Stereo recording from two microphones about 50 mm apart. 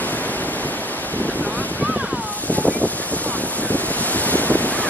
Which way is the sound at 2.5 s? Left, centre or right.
Left.